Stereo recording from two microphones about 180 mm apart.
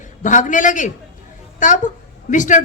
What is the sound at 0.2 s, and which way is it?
A woman's voice, 45° left (ahead or behind).